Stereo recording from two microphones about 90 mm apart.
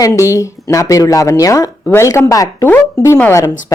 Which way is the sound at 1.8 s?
30° left (ahead or behind).